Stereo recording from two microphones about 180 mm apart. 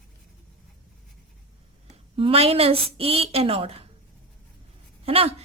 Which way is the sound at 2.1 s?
30° right (ahead or behind).